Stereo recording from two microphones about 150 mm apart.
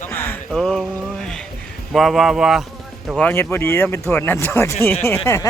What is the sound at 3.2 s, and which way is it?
Speech, 15° left (ahead or behind).